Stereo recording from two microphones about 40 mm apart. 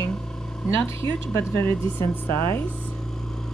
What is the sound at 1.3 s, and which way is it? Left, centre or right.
Speech, left.